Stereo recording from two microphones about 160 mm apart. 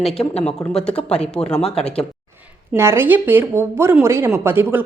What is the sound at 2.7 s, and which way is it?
Speech, 15° right (ahead or behind).